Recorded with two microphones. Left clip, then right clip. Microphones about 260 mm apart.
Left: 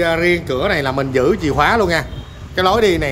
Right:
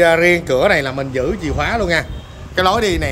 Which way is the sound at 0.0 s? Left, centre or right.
Centre.